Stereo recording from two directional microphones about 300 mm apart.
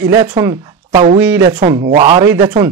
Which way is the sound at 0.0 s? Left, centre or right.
Centre.